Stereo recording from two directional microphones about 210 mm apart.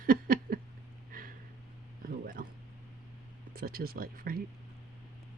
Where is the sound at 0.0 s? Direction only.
45° right (ahead or behind).